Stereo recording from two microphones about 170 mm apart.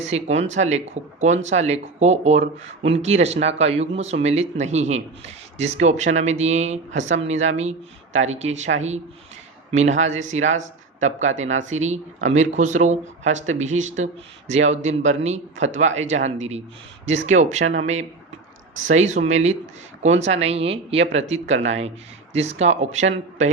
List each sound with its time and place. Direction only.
0.0 s speech: 40° right (ahead or behind)